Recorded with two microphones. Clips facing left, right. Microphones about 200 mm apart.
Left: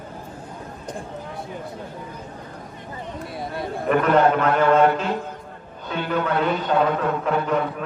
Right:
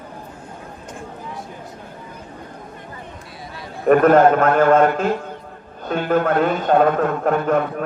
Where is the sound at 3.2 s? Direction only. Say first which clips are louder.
Left 7 dB; 55° left (ahead or behind).